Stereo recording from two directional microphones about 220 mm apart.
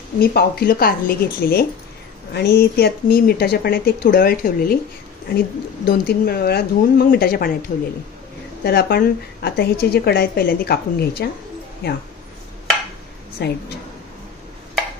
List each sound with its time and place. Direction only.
0.2 s a woman's voice: 45° left (ahead or behind)
5.9 s a woman's voice: 45° left (ahead or behind)
8.6 s a woman's voice: 45° left (ahead or behind)
13.4 s a woman's voice: 45° left (ahead or behind)